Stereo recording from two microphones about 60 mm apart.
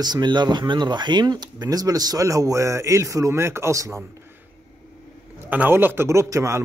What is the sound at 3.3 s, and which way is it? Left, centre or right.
Speech, right.